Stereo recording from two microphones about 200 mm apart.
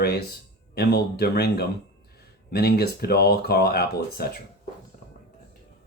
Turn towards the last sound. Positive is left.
turn(degrees=50)  # may be behind; listen again after turning